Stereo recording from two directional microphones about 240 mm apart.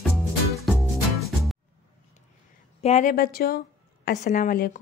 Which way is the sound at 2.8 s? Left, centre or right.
Left.